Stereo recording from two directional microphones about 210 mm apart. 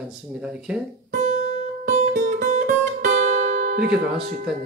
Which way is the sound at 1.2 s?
35° right (ahead or behind).